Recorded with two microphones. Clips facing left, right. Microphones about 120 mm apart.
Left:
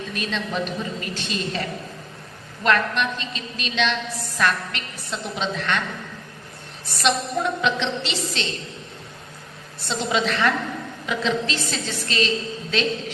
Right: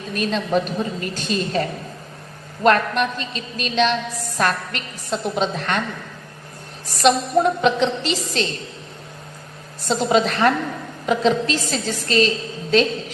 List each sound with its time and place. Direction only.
0.1 s a woman's voice: 40° right (ahead or behind)
6.8 s a woman's voice: 40° right (ahead or behind)
9.8 s a woman's voice: 45° right (ahead or behind)